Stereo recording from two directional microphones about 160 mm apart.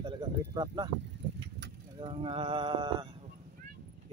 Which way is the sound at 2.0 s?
35° right (ahead or behind).